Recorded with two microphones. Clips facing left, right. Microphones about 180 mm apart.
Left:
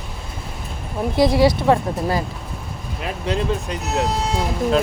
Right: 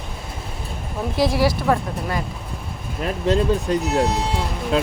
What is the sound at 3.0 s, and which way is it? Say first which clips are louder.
Speech: right 4 dB; 45° right (ahead or behind).